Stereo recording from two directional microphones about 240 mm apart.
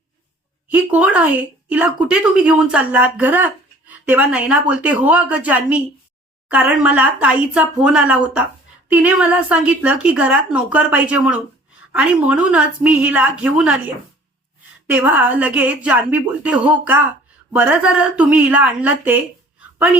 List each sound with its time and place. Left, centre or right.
0.7 s a woman's voice: centre
14.8 s a woman's voice: centre